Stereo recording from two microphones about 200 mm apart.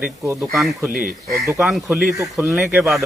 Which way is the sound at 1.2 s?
15° left (ahead or behind).